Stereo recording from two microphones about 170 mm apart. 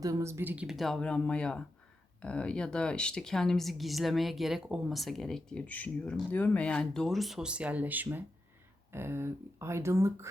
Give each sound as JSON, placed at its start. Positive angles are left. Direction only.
{"t": 0.0, "sound": "speech", "side_deg": -20}